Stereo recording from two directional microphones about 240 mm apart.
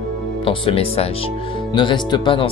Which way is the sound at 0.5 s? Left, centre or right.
Left.